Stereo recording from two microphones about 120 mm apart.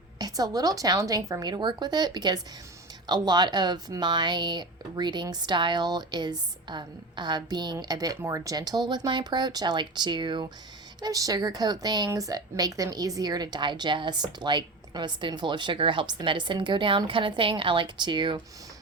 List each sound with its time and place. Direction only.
0.2 s a woman's voice: 30° right (ahead or behind)